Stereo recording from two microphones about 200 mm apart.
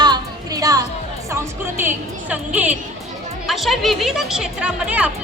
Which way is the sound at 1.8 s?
10° right (ahead or behind).